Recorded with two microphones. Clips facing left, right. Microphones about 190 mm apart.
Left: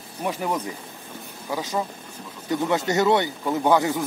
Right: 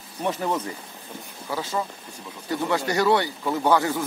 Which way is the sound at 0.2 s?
10° left (ahead or behind).